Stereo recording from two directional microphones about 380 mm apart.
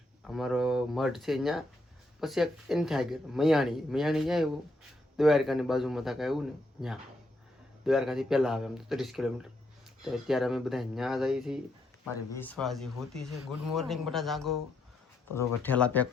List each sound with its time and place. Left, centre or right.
0.3 s speech: centre